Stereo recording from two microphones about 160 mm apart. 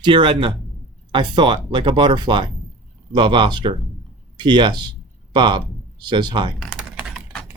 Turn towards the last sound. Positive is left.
turn(degrees=0)  # may be behind; listen again after turning